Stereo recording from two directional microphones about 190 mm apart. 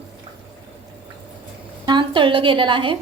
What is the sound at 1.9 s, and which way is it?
A woman's voice, 25° right (ahead or behind).